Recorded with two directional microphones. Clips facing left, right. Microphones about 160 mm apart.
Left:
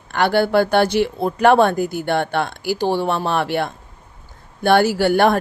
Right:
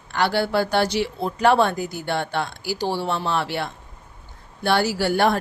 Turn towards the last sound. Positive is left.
turn(degrees=55)  # may be behind; listen again after turning